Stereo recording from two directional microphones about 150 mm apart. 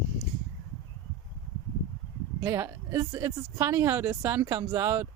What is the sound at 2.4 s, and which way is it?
Speech, 15° right (ahead or behind).